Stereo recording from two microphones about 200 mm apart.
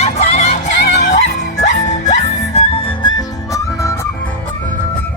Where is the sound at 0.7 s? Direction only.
65° left (ahead or behind).